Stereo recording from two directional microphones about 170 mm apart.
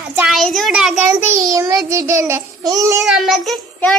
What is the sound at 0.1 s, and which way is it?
Child singing, 5° right (ahead or behind).